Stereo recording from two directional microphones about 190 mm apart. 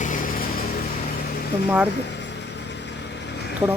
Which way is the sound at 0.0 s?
45° left (ahead or behind).